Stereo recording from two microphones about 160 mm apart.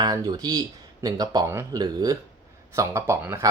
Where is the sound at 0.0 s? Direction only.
25° right (ahead or behind).